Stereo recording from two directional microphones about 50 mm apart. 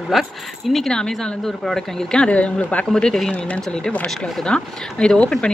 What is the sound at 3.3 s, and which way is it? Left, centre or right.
A woman's voice, left.